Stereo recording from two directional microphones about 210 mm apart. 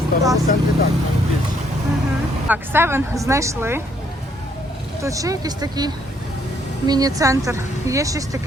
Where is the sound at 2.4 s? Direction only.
10° right (ahead or behind).